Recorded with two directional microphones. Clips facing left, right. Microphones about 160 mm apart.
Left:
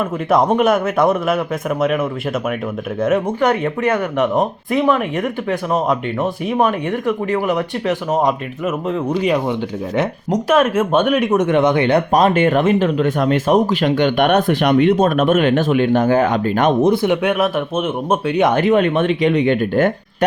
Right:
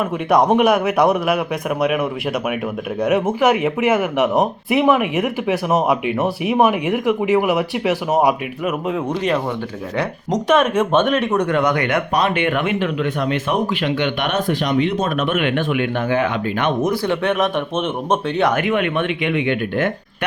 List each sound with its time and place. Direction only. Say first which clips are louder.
0.0 s speech: even; centre (ahead or behind)
3.4 s speech: right 1 dB; 5° right (ahead or behind)
9.0 s speech: left 5 dB; 10° left (ahead or behind); by 16.7 s 45° left (ahead or behind)
16.8 s speech: left 4 dB; 20° left (ahead or behind)
18.4 s speech: left 6 dB; 35° left (ahead or behind)